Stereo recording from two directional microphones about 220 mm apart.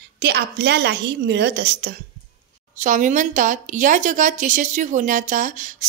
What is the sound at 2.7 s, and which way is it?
Speech, 35° right (ahead or behind).